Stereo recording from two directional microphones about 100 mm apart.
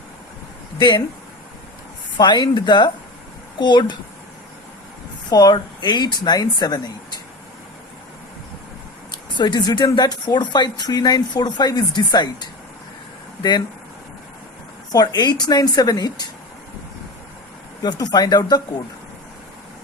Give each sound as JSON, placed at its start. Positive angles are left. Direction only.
{"t": 0.8, "sound": "speech", "side_deg": 50}
{"t": 2.1, "sound": "speech", "side_deg": 45}
{"t": 5.3, "sound": "speech", "side_deg": 40}
{"t": 9.1, "sound": "speech", "side_deg": 50}
{"t": 14.9, "sound": "speech", "side_deg": 45}
{"t": 17.8, "sound": "speech", "side_deg": 40}